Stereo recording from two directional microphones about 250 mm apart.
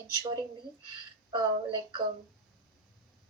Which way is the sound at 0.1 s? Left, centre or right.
Centre.